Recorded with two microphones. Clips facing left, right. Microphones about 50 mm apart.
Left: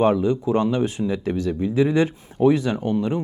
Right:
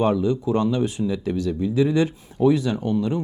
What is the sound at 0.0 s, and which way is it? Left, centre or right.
Speech, left.